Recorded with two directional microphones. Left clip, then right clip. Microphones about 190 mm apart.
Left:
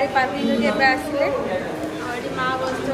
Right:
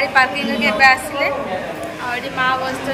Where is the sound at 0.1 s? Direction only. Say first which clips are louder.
Right 5 dB; 20° left (ahead or behind).